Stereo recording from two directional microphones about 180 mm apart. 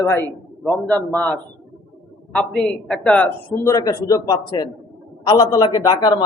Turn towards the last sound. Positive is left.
turn(degrees=20)  # may be behind; listen again after turning